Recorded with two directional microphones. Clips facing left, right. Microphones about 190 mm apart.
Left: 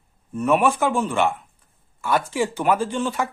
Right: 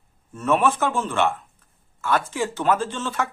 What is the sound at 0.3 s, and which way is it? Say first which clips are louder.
Speech: left 2 dB; 15° left (ahead or behind).